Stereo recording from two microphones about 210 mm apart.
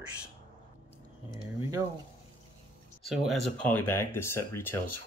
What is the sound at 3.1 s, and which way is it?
Speech, centre (ahead or behind).